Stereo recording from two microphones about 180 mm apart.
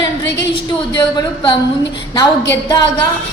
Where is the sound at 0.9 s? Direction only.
25° left (ahead or behind).